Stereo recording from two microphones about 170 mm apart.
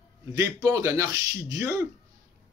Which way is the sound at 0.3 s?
20° right (ahead or behind).